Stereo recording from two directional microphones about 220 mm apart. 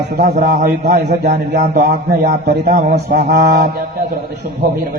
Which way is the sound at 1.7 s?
35° right (ahead or behind).